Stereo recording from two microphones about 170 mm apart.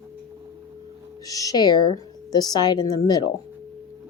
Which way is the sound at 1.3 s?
20° left (ahead or behind).